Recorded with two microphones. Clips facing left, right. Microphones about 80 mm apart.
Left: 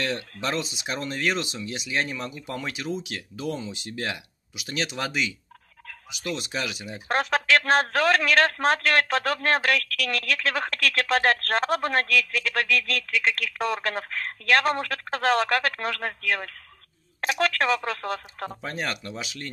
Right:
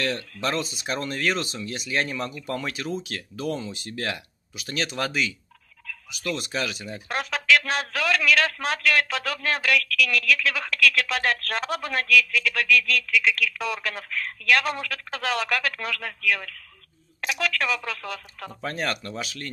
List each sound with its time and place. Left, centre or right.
0.0 s speech: left
7.1 s speech: left
18.5 s speech: centre